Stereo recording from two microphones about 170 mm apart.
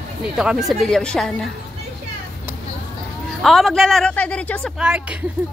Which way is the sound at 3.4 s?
Centre (ahead or behind).